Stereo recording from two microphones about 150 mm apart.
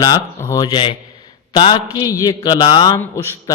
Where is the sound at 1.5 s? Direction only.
35° left (ahead or behind).